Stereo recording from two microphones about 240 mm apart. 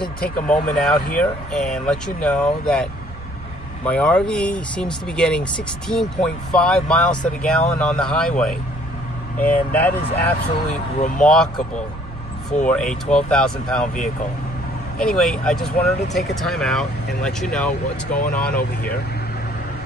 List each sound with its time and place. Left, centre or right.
0.2 s speech: left
0.7 s speech: centre
11.0 s speech: left
11.2 s speech: centre
12.6 s speech: centre
15.0 s speech: centre